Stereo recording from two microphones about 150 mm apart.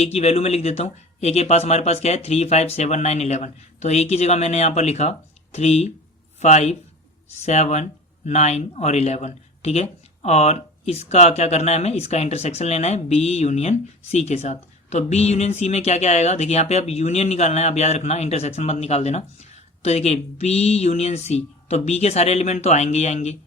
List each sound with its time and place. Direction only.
0.0 s speech: 45° left (ahead or behind)